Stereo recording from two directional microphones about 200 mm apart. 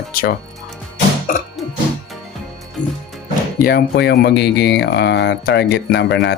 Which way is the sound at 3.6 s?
50° left (ahead or behind).